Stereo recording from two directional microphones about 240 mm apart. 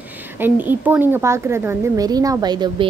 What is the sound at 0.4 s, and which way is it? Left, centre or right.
Speech, centre.